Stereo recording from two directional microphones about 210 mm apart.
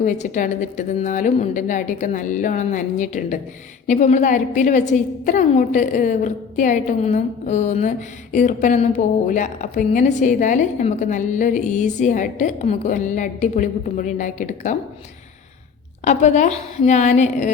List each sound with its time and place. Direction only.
0.0 s a woman's voice: 35° left (ahead or behind)
16.0 s a woman's voice: 35° left (ahead or behind)